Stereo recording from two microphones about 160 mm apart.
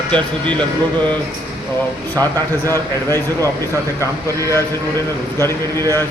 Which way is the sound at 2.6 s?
15° left (ahead or behind).